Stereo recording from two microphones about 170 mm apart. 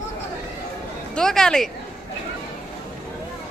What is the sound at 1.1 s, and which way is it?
Speech, 5° left (ahead or behind).